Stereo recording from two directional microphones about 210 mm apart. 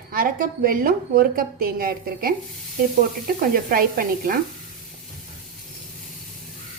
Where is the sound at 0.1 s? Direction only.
45° right (ahead or behind).